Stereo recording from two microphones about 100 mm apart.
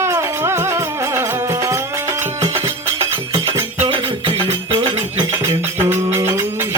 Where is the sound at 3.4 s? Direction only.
30° right (ahead or behind).